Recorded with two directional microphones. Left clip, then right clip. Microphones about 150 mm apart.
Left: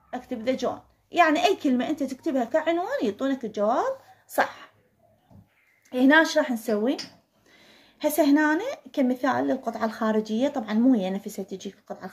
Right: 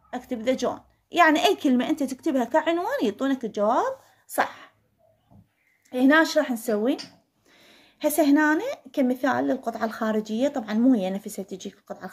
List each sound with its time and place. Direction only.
0.1 s a woman's voice: 35° right (ahead or behind); by 4.6 s 20° right (ahead or behind)
5.9 s speech: 15° right (ahead or behind); by 12.1 s 30° right (ahead or behind)